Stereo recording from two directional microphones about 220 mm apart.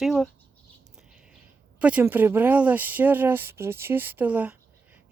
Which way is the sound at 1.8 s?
5° right (ahead or behind).